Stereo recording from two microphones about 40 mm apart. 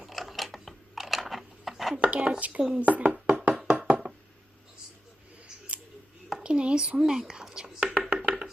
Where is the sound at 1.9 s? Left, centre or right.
Right.